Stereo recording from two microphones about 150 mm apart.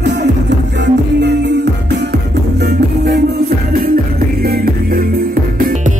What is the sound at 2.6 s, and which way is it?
Music, 90° right.